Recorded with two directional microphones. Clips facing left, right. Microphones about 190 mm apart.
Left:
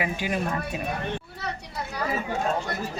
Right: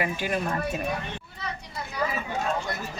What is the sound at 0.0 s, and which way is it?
Speech, 10° left (ahead or behind).